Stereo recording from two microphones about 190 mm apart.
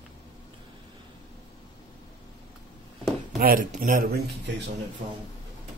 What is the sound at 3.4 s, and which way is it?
Speech, 50° right (ahead or behind).